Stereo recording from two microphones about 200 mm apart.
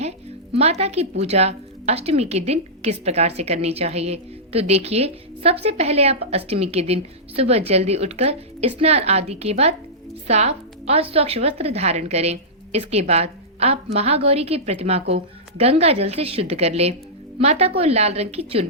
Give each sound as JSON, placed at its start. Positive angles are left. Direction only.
{"t": 0.5, "sound": "a woman's voice", "side_deg": -30}